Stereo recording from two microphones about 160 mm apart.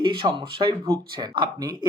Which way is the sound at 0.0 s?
30° right (ahead or behind).